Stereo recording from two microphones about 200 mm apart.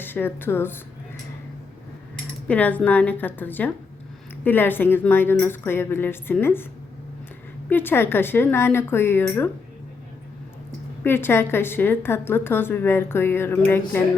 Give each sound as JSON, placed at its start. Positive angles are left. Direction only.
{"t": 0.0, "sound": "speech", "side_deg": 10}
{"t": 2.5, "sound": "a woman's voice", "side_deg": 10}
{"t": 7.7, "sound": "a woman's voice", "side_deg": 10}
{"t": 11.0, "sound": "a woman's voice", "side_deg": 10}